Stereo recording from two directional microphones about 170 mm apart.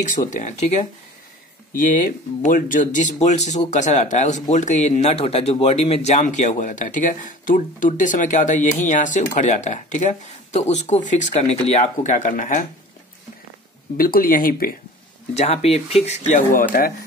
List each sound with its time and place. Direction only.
0.0 s speech: 50° left (ahead or behind)
13.9 s speech: 60° left (ahead or behind)
15.3 s speech: 40° left (ahead or behind); by 16.9 s 55° left (ahead or behind)